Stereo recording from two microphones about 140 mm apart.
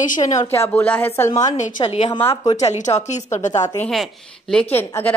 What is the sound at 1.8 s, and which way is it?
Speech, 40° left (ahead or behind).